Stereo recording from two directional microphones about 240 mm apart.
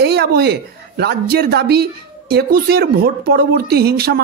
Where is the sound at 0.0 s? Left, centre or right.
Right.